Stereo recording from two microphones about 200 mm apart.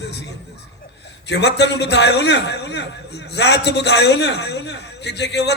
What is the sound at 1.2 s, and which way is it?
A man's voice, 60° left (ahead or behind).